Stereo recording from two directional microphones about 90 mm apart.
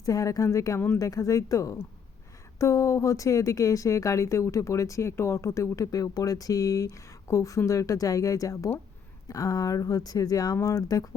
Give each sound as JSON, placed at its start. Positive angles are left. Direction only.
{"t": 0.0, "sound": "speech", "side_deg": 40}